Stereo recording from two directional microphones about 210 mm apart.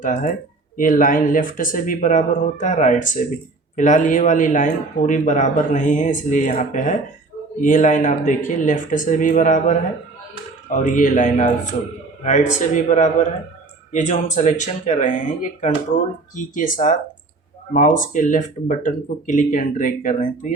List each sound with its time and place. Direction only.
0.0 s speech: 40° left (ahead or behind)